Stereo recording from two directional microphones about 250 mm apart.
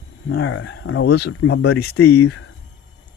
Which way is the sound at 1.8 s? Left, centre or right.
Left.